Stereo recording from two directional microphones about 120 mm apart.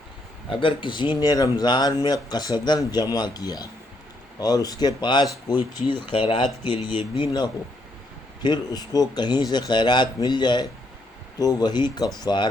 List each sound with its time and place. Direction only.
0.6 s speech: 45° left (ahead or behind)